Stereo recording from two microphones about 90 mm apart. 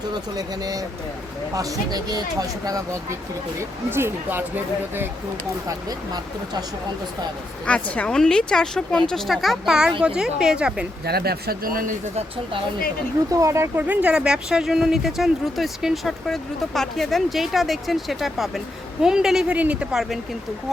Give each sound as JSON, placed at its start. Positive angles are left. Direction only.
{"t": 0.1, "sound": "speech", "side_deg": -45}
{"t": 2.6, "sound": "speech", "side_deg": -35}
{"t": 5.6, "sound": "speech", "side_deg": -45}
{"t": 7.6, "sound": "a woman's voice", "side_deg": 15}
{"t": 13.3, "sound": "speech", "side_deg": -35}
{"t": 13.8, "sound": "a woman's voice", "side_deg": -15}